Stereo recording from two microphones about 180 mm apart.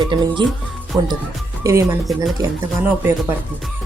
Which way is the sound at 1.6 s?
15° right (ahead or behind).